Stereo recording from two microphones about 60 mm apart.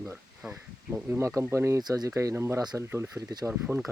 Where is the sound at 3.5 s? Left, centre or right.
Right.